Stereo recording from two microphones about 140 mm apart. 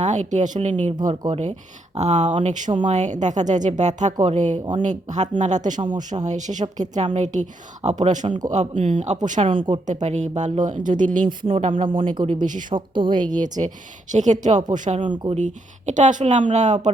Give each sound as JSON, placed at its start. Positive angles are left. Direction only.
{"t": 0.0, "sound": "speech", "side_deg": -55}
{"t": 9.5, "sound": "a woman's voice", "side_deg": -35}
{"t": 9.8, "sound": "speech", "side_deg": -55}
{"t": 11.3, "sound": "a woman's voice", "side_deg": -40}
{"t": 12.3, "sound": "speech", "side_deg": -65}
{"t": 12.7, "sound": "a woman's voice", "side_deg": -35}
{"t": 13.3, "sound": "speech", "side_deg": -65}
{"t": 15.0, "sound": "a woman's voice", "side_deg": -35}
{"t": 15.4, "sound": "speech", "side_deg": -60}